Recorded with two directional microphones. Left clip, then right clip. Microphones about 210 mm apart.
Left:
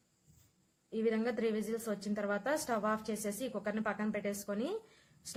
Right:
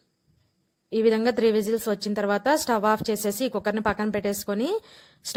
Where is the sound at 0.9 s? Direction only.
40° right (ahead or behind).